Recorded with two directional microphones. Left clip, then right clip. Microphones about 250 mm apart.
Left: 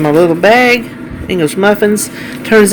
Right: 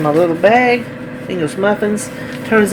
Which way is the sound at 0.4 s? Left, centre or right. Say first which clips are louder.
Left 2 dB; left.